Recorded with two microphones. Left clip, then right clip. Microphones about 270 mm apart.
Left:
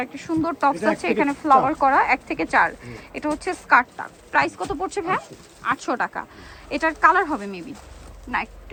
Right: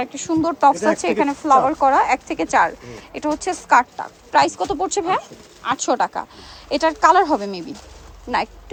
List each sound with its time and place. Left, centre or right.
0.0 s speech: centre